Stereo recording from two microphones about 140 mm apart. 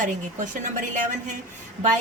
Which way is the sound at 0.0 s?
65° right (ahead or behind).